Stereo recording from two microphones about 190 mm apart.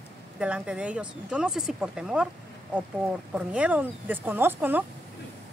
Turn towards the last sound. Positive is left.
turn(degrees=-10)  # may be behind; listen again after turning